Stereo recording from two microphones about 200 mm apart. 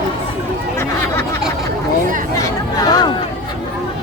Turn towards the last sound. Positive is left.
turn(degrees=20)  # may be behind; listen again after turning